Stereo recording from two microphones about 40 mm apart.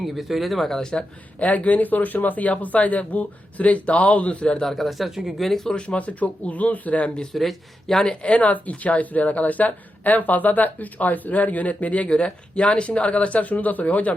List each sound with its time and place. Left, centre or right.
0.0 s speech: centre
0.8 s speech: centre
1.4 s speech: left
4.6 s speech: centre
5.7 s speech: left
7.3 s speech: centre
8.1 s speech: left